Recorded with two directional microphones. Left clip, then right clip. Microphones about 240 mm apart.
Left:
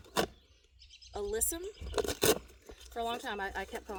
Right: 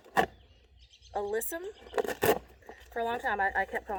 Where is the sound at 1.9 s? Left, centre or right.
Left.